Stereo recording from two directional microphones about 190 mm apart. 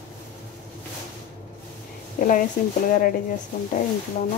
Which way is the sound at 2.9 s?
50° left (ahead or behind).